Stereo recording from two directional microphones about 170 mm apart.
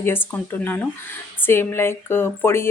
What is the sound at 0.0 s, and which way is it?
A woman's voice, 15° left (ahead or behind).